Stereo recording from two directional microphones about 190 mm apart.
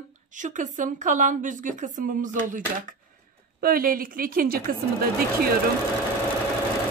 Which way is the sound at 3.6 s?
50° right (ahead or behind).